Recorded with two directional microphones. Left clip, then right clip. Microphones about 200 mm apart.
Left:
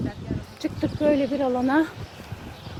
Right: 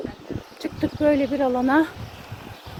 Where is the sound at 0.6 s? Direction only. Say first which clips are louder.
Right 2 dB; 5° right (ahead or behind).